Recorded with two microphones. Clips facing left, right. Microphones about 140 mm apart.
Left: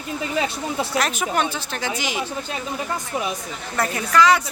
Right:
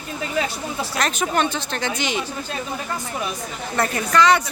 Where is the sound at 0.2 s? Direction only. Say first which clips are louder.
Right 1 dB; 25° left (ahead or behind).